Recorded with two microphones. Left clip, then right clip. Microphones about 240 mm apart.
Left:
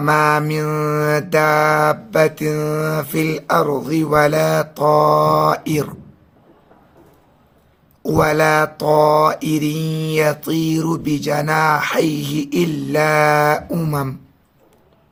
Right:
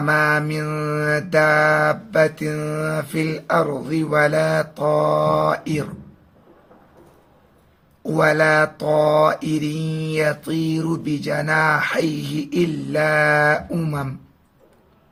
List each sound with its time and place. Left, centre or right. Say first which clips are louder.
0.0 s mantra: left 3 dB; left
8.0 s mantra: left 2 dB; left